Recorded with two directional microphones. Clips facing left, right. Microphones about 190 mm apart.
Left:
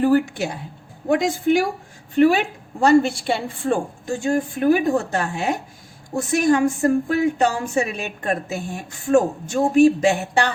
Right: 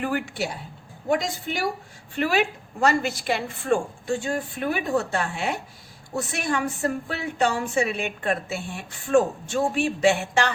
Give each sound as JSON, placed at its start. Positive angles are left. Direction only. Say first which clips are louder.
{"t": 0.0, "sound": "a woman's voice", "louder": "left 9 dB", "side_deg": 35}
{"t": 1.0, "sound": "a woman's voice", "louder": "left 7 dB", "side_deg": 50}
{"t": 2.8, "sound": "a woman's voice", "louder": "left 7 dB", "side_deg": 30}